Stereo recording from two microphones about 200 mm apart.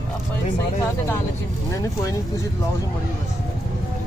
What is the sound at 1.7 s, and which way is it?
Speech, 15° left (ahead or behind).